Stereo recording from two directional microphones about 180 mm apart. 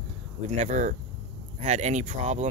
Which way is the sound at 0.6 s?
45° right (ahead or behind).